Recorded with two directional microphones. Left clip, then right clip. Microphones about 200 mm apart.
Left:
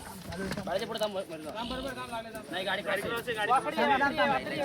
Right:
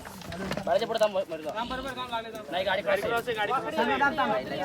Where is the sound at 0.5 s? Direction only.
50° right (ahead or behind).